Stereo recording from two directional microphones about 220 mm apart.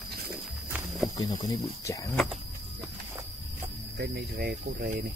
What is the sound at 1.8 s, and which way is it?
Speech, 15° left (ahead or behind).